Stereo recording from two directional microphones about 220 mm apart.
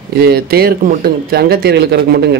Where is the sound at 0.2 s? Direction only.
45° right (ahead or behind).